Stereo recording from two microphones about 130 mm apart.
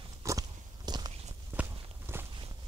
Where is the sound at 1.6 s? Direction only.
20° right (ahead or behind).